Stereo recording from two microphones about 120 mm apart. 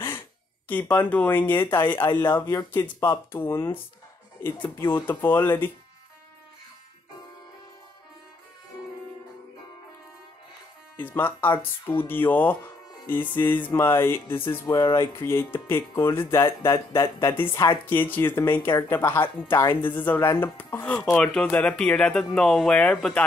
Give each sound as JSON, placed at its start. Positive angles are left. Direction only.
{"t": 0.7, "sound": "speech", "side_deg": 15}
{"t": 3.3, "sound": "speech", "side_deg": 20}
{"t": 11.0, "sound": "speech", "side_deg": 15}
{"t": 14.7, "sound": "speech", "side_deg": 40}
{"t": 15.0, "sound": "speech", "side_deg": 20}